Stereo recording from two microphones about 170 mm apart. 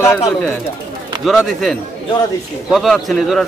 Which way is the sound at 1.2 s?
Centre (ahead or behind).